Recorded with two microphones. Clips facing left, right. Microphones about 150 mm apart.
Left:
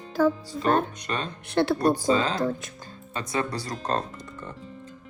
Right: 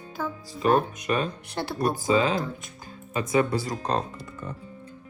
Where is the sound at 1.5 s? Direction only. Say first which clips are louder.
Left 9 dB; 90° left.